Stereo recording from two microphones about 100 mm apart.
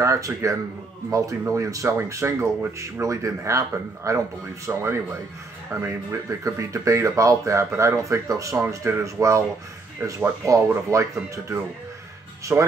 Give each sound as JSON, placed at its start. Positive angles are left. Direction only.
{"t": 0.0, "sound": "speech", "side_deg": -30}
{"t": 12.5, "sound": "speech", "side_deg": -15}